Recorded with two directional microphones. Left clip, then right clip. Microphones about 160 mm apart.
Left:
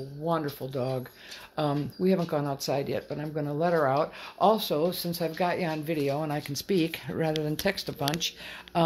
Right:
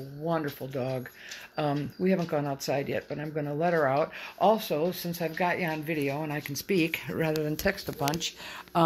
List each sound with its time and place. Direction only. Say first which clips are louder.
0.2 s speech: left 1 dB; centre (ahead or behind); by 7.8 s 25° left (ahead or behind)
8.7 s speech: right 1 dB; centre (ahead or behind)